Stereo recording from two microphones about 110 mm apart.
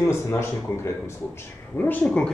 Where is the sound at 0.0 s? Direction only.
25° left (ahead or behind).